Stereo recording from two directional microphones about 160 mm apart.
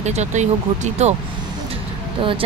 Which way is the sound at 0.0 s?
45° right (ahead or behind).